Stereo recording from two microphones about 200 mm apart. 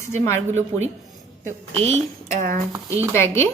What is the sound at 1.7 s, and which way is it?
Speech, 30° right (ahead or behind).